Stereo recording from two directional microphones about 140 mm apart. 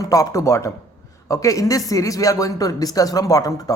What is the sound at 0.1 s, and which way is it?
Speech, 25° left (ahead or behind).